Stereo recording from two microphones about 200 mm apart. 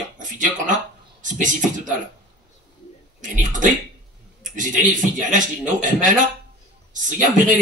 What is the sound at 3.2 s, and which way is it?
Speech, 40° right (ahead or behind).